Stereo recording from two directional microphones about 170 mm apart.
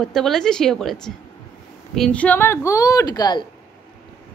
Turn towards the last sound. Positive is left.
turn(degrees=25)  # may be behind; listen again after turning